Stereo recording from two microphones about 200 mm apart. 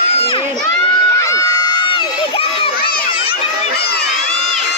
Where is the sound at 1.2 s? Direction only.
15° left (ahead or behind).